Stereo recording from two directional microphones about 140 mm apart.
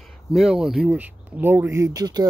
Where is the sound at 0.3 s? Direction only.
Centre (ahead or behind).